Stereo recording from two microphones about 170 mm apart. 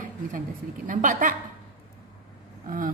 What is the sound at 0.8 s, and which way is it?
Speech, 50° right (ahead or behind).